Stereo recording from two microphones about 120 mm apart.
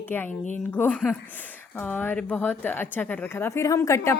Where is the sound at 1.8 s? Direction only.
15° left (ahead or behind).